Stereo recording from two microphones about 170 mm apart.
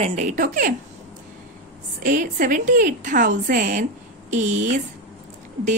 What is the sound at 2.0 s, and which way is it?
A woman's voice, 55° right (ahead or behind).